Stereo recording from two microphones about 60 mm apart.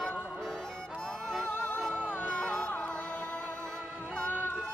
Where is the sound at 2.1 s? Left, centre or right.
Left.